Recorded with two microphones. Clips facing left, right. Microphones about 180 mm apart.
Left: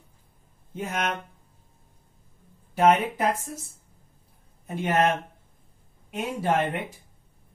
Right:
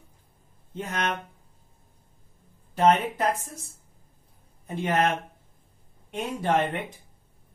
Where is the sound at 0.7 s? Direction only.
10° left (ahead or behind).